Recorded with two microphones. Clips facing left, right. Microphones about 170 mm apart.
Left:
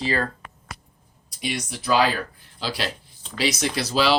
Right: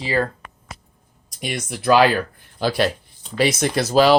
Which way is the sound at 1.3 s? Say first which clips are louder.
Right 2 dB; 50° right (ahead or behind).